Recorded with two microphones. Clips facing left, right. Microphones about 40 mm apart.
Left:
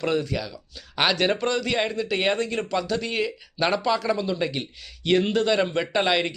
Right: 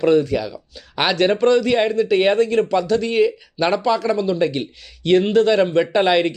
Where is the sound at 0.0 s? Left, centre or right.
Centre.